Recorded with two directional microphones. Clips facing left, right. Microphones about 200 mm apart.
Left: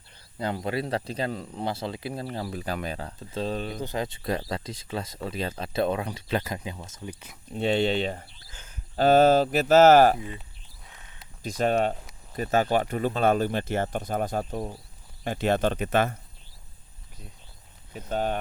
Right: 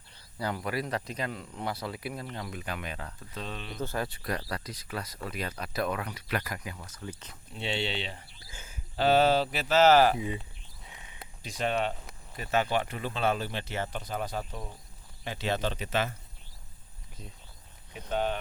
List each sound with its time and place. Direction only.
0.3 s speech: 25° left (ahead or behind)
3.8 s speech: 20° left (ahead or behind)
7.5 s speech: 45° left (ahead or behind)
8.4 s a sound: 10° right (ahead or behind)
9.0 s speech: 45° left (ahead or behind)
10.8 s a sound: 10° right (ahead or behind)
11.4 s speech: 45° left (ahead or behind)
18.1 s speech: 40° left (ahead or behind)